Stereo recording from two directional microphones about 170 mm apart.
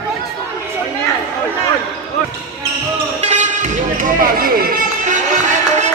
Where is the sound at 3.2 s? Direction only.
45° right (ahead or behind).